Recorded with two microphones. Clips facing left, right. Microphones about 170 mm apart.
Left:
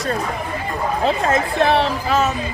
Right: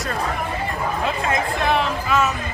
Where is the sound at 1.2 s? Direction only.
35° left (ahead or behind).